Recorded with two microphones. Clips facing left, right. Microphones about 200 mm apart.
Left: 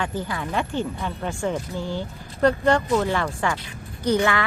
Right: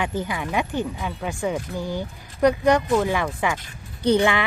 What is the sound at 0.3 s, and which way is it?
Speech, 15° right (ahead or behind).